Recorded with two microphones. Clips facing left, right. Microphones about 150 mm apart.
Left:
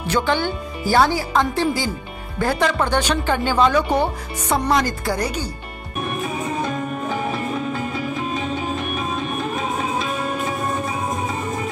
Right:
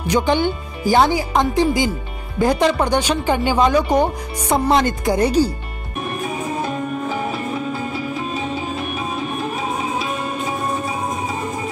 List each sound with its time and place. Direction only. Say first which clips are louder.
0.0 s speech: right 3 dB; 15° right (ahead or behind)
4.6 s speech: right 4 dB; 25° right (ahead or behind)